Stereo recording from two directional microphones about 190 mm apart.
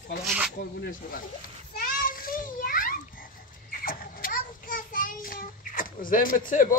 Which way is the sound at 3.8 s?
45° left (ahead or behind).